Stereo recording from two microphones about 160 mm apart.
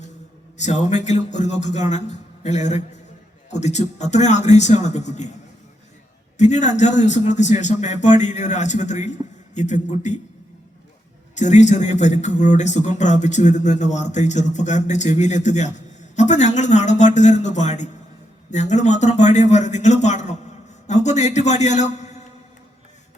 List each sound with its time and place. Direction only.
0.5 s a man's voice: 45° left (ahead or behind)
6.3 s a man's voice: 45° left (ahead or behind)
11.3 s a man's voice: 45° left (ahead or behind)